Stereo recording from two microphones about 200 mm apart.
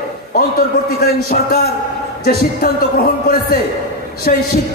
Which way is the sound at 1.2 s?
50° left (ahead or behind).